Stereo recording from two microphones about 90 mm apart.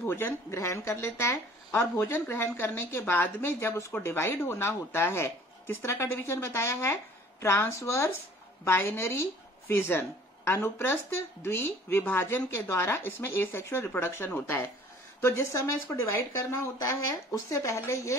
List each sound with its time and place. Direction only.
0.0 s speech: 25° left (ahead or behind)